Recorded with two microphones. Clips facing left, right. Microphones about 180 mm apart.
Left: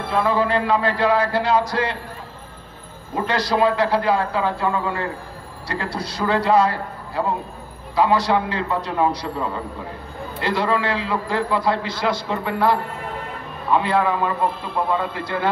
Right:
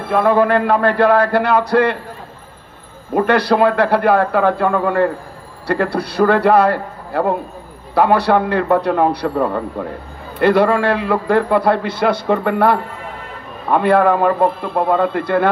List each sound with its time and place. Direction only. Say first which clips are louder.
0.1 s a man's voice: right 7 dB; 55° right (ahead or behind)
3.2 s a man's voice: right 6 dB; 60° right (ahead or behind)